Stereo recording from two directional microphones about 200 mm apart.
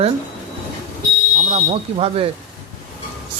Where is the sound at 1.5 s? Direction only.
30° right (ahead or behind).